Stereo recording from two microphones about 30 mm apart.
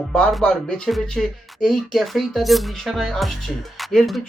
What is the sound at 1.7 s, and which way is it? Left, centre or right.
Speech, centre.